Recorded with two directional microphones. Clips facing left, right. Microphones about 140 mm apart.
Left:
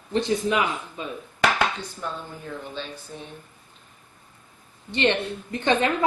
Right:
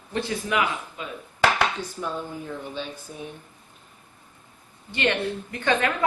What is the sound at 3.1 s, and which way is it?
Speech, 10° right (ahead or behind).